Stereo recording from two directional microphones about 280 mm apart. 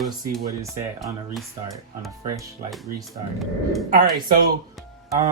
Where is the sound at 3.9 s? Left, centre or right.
Right.